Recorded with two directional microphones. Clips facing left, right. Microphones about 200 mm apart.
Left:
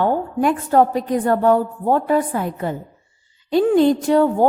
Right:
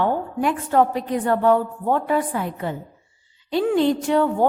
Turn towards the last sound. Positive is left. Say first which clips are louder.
# left 4 dB
turn(degrees=40)  # may be behind; listen again after turning